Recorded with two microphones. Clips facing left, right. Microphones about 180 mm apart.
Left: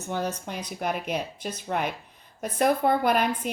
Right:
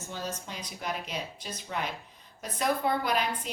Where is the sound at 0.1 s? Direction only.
60° left (ahead or behind).